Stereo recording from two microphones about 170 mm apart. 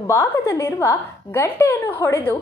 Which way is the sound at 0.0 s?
15° left (ahead or behind).